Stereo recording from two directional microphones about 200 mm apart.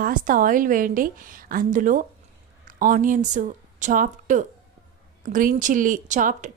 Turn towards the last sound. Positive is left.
turn(degrees=-40)  # may be behind; listen again after turning